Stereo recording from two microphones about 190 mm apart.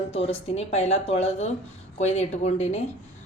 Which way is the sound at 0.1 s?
30° left (ahead or behind).